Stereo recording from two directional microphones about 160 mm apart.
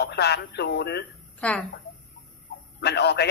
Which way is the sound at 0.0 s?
90° left.